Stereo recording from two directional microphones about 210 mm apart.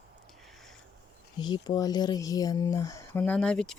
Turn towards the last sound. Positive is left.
turn(degrees=5)  # may be behind; listen again after turning